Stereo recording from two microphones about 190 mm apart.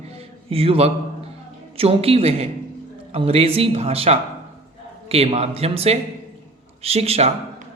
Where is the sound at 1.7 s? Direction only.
30° right (ahead or behind).